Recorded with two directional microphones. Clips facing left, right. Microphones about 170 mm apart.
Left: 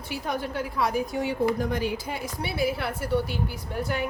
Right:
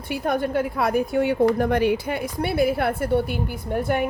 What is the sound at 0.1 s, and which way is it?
A woman's voice, 55° right (ahead or behind).